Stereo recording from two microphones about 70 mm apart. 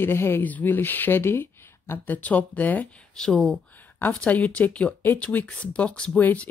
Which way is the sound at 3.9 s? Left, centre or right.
Centre.